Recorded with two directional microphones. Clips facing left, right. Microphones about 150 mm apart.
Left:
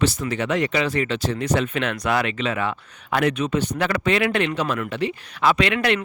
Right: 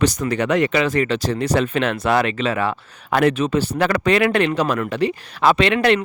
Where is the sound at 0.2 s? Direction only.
45° right (ahead or behind); by 0.9 s 65° right (ahead or behind).